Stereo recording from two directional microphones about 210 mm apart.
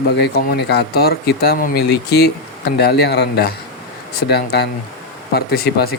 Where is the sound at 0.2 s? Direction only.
50° left (ahead or behind).